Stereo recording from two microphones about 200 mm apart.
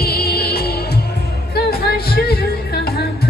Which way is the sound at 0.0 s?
50° left (ahead or behind).